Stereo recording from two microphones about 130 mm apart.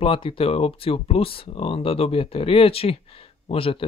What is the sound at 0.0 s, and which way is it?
Speech, 45° left (ahead or behind).